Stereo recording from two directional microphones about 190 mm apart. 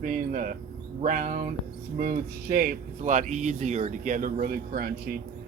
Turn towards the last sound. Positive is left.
turn(degrees=-50)  # may be behind; listen again after turning